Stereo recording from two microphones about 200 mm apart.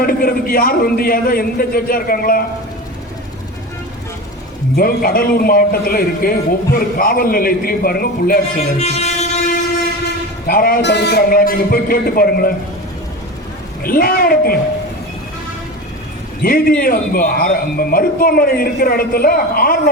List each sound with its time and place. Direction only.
0.0 s speech: 45° left (ahead or behind)
4.8 s speech: 45° left (ahead or behind)
8.8 s train: 35° left (ahead or behind)
10.4 s speech: 45° left (ahead or behind)
13.8 s speech: 45° left (ahead or behind)
16.4 s speech: 45° left (ahead or behind)